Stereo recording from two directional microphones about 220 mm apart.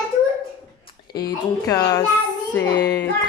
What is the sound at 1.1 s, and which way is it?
Speech, 45° left (ahead or behind).